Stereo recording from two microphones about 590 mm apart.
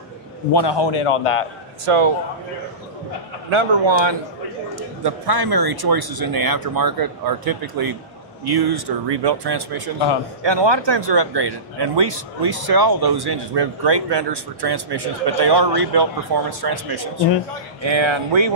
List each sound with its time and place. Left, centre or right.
0.5 s a man's voice: left
1.9 s a man's voice: right
3.4 s speech: right
5.0 s speech: right